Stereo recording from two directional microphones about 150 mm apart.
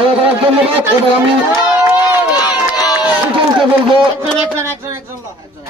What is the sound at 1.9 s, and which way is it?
Crowd, 25° left (ahead or behind).